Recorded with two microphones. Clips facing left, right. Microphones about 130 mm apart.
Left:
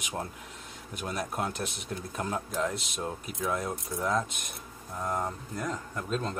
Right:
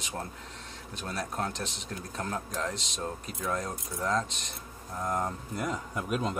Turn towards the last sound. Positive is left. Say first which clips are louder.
# right 1 dB
turn(degrees=-15)  # may be behind; listen again after turning